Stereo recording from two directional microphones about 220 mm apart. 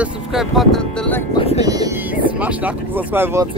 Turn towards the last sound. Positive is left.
turn(degrees=-10)  # may be behind; listen again after turning